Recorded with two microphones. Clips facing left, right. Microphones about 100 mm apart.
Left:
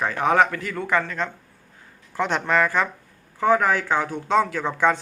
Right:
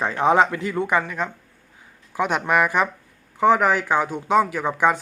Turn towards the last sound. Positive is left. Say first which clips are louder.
# right 1 dB
turn(degrees=-15)  # may be behind; listen again after turning